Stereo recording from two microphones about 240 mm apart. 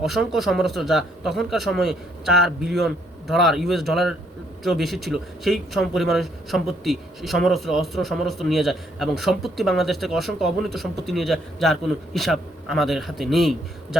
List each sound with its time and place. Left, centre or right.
0.0 s speech: centre